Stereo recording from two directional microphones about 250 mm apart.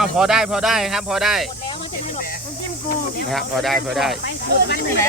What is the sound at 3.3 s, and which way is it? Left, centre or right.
Speech, centre.